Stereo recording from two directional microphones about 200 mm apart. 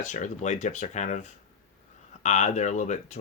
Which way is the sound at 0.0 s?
40° left (ahead or behind).